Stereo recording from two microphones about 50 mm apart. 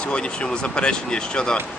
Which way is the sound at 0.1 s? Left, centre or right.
Centre.